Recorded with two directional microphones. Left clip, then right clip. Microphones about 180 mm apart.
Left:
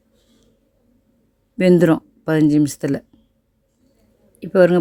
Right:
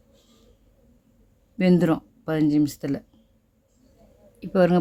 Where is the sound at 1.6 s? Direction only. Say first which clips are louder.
Left 8 dB; 35° left (ahead or behind).